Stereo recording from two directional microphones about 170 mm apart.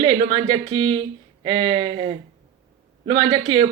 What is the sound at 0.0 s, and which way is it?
Speech, 30° right (ahead or behind).